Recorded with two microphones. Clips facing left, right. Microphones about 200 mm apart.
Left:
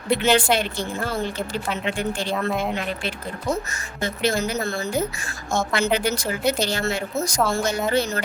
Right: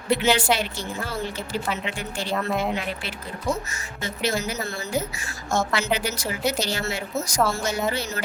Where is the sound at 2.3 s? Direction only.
Centre (ahead or behind).